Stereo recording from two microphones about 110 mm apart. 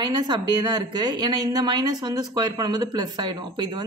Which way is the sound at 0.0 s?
40° right (ahead or behind).